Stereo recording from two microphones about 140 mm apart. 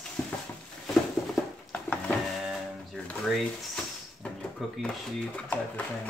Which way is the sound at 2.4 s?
Centre (ahead or behind).